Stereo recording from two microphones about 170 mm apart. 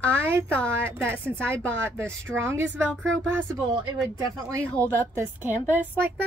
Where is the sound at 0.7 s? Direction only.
15° right (ahead or behind).